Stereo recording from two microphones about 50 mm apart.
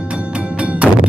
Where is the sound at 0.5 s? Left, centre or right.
Right.